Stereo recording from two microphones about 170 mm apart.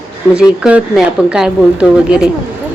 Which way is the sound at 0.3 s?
5° right (ahead or behind).